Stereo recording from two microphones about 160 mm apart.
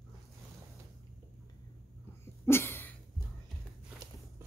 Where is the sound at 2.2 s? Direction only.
15° left (ahead or behind).